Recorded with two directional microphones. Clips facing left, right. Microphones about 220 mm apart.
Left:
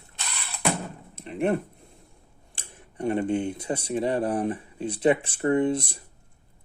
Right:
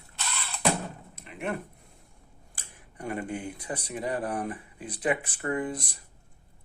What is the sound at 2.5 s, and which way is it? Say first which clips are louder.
Speech: left 8 dB; 25° left (ahead or behind).